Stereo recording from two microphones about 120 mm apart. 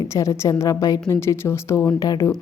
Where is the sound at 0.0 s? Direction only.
25° left (ahead or behind).